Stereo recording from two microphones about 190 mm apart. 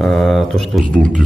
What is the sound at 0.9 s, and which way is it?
Speech, 45° right (ahead or behind).